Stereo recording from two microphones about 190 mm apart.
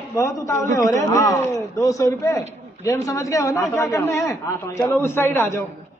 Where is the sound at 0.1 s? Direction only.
15° left (ahead or behind).